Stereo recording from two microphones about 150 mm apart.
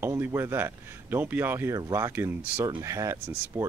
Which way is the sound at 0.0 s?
15° right (ahead or behind).